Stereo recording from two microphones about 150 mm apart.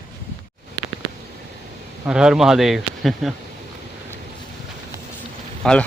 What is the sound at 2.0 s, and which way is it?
Speech, 5° right (ahead or behind).